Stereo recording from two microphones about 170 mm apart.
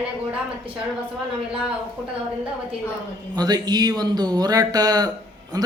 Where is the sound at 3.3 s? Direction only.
25° right (ahead or behind).